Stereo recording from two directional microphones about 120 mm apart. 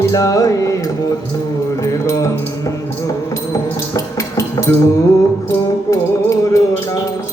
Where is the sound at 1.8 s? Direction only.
25° left (ahead or behind).